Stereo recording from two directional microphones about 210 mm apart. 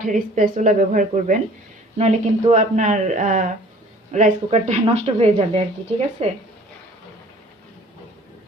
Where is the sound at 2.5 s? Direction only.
35° right (ahead or behind).